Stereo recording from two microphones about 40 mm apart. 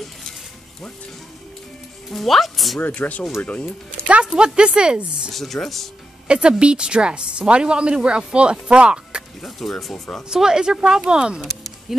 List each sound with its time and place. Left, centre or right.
2.0 s speech: centre
2.9 s speech: left
4.4 s a woman's voice: right
5.3 s speech: centre
6.2 s a woman's voice: right
9.4 s speech: centre
10.3 s speech: centre
11.9 s speech: centre